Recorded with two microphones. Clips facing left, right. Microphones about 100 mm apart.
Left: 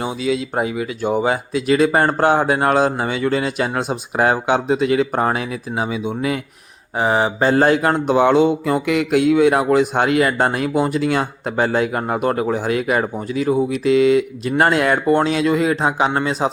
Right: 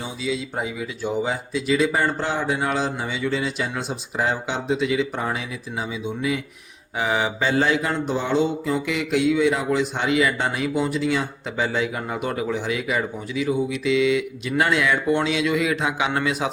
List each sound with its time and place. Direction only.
0.0 s speech: 65° left (ahead or behind)
6.9 s mantra: 35° left (ahead or behind)
14.6 s speech: 50° left (ahead or behind); by 16.5 s 35° left (ahead or behind)